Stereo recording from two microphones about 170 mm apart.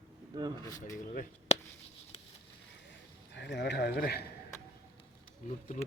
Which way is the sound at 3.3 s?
90° left.